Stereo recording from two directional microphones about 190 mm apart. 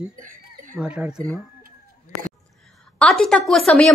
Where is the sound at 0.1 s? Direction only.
45° right (ahead or behind).